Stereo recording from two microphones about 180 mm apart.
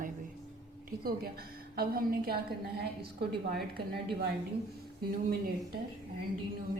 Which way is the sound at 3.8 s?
25° right (ahead or behind).